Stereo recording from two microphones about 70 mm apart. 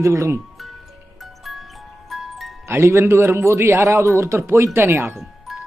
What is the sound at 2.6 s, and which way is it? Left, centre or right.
Speech, right.